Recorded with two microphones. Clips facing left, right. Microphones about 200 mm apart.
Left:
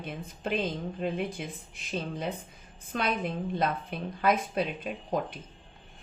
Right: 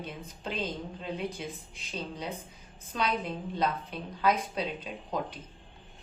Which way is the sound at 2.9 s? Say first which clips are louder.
Left 1 dB; 60° left (ahead or behind).